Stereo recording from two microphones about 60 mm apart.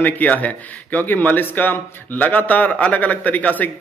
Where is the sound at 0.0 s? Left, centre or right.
Left.